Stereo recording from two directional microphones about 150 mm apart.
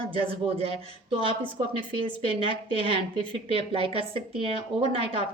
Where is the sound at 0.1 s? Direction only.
40° right (ahead or behind).